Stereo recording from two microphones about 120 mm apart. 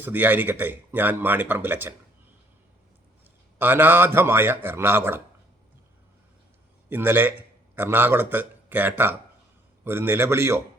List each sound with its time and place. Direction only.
0.0 s speech: 15° right (ahead or behind)
3.6 s speech: 15° right (ahead or behind)
6.9 s a man's voice: 15° right (ahead or behind)